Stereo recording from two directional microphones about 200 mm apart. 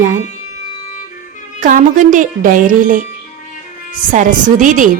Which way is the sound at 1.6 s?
40° right (ahead or behind).